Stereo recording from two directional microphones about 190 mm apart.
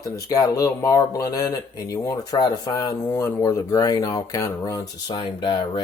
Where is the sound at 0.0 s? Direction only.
20° left (ahead or behind).